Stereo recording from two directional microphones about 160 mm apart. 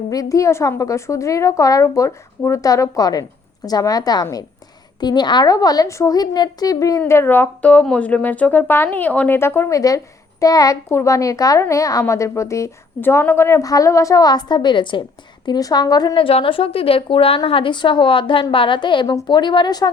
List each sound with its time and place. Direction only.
0.1 s a child's voice: 20° left (ahead or behind)